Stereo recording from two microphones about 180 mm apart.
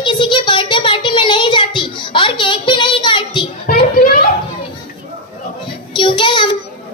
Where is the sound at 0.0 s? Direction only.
25° left (ahead or behind).